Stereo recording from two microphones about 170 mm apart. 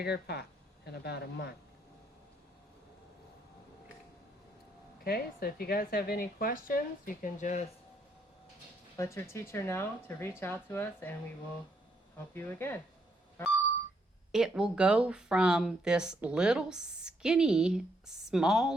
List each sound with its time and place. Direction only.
0.0 s speech: 70° left (ahead or behind)
5.0 s speech: 65° left (ahead or behind); by 7.6 s 45° left (ahead or behind)
9.0 s speech: 15° left (ahead or behind)
12.3 s speech: 15° left (ahead or behind)
14.3 s speech: 5° right (ahead or behind)